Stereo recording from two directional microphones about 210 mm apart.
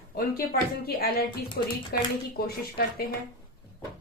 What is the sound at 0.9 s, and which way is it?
Speech, 45° left (ahead or behind).